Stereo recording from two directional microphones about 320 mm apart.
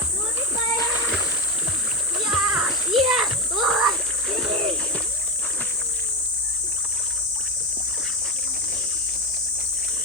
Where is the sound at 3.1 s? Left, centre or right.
Centre.